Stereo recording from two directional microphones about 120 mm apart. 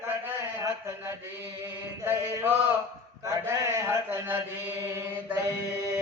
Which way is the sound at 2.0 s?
15° right (ahead or behind).